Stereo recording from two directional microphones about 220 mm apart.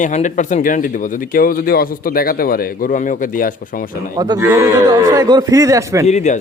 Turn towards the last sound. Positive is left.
turn(degrees=30)  # may be behind; listen again after turning